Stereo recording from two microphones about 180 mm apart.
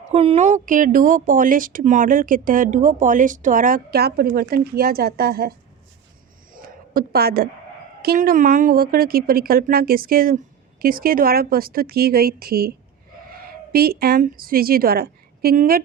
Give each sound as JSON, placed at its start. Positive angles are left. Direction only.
{"t": 0.1, "sound": "speech", "side_deg": -35}
{"t": 6.5, "sound": "a sound", "side_deg": -50}
{"t": 8.0, "sound": "a woman's voice", "side_deg": -55}